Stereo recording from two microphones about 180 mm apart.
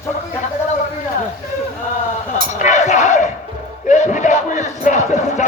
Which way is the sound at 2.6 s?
40° left (ahead or behind).